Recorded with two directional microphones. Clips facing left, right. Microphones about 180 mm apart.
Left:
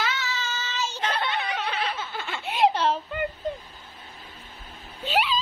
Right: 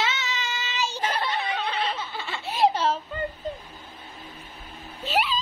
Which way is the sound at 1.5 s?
25° right (ahead or behind).